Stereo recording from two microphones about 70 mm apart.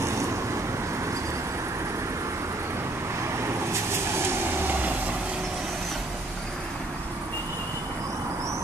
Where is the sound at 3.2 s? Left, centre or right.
Right.